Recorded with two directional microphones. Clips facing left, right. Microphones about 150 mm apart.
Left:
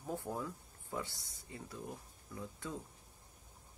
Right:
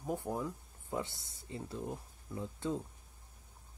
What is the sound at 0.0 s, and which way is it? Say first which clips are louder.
Speech: right 4 dB; 15° right (ahead or behind).